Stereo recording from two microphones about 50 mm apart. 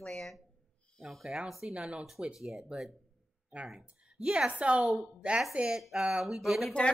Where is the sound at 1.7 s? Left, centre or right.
Right.